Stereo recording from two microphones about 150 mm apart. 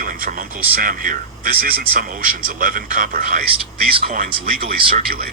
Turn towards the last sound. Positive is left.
turn(degrees=-85)